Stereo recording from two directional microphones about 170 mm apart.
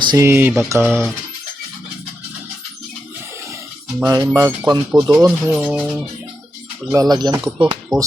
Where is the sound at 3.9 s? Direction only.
20° right (ahead or behind).